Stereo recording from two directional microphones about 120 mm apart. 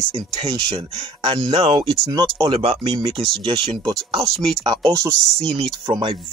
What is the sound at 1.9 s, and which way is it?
Speech, 30° right (ahead or behind).